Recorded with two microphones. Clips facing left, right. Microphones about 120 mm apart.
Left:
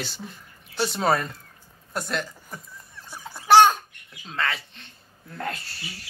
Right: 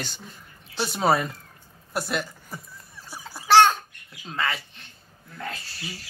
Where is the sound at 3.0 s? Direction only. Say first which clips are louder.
Even; 5° right (ahead or behind).